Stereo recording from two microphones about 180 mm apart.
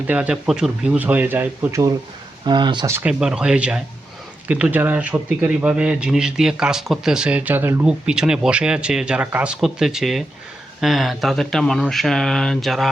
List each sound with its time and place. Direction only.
0.1 s speech: 5° right (ahead or behind)
2.4 s speech: 25° right (ahead or behind)
2.9 s a man's voice: 5° right (ahead or behind)